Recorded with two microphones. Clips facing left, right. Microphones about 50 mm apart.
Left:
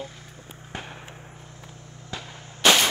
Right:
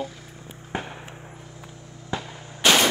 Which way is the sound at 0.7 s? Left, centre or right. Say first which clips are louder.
Right 6 dB; centre.